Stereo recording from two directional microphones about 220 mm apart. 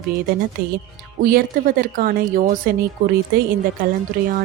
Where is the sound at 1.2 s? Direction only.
40° right (ahead or behind).